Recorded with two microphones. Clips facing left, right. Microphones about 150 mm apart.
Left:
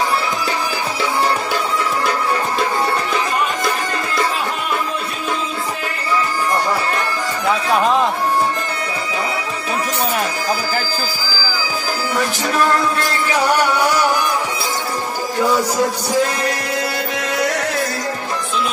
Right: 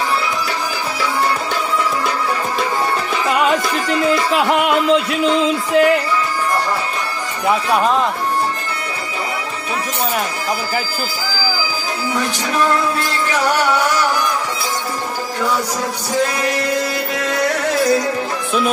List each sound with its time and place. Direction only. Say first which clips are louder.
4.4 s music: right 7 dB; 80° right